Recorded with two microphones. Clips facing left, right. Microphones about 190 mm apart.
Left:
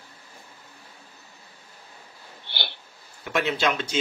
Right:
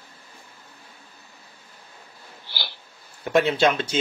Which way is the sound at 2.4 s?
60° left (ahead or behind).